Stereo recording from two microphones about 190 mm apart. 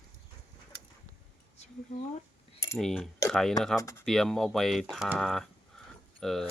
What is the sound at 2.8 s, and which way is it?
Speech, centre (ahead or behind).